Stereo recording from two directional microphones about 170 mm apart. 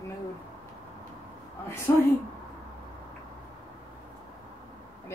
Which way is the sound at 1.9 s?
20° left (ahead or behind).